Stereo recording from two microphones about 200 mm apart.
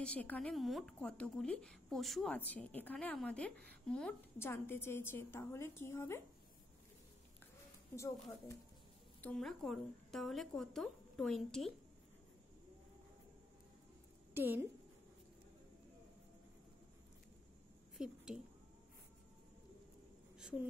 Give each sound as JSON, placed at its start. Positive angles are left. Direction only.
{"t": 0.0, "sound": "a woman's voice", "side_deg": 5}
{"t": 7.9, "sound": "a woman's voice", "side_deg": 15}
{"t": 9.2, "sound": "a woman's voice", "side_deg": 0}
{"t": 14.3, "sound": "a woman's voice", "side_deg": -10}
{"t": 17.9, "sound": "a sound", "side_deg": 0}
{"t": 20.3, "sound": "a sound", "side_deg": -5}